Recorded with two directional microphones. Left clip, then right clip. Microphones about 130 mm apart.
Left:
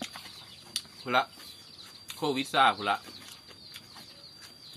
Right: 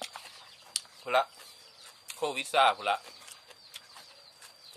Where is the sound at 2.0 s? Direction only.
40° right (ahead or behind).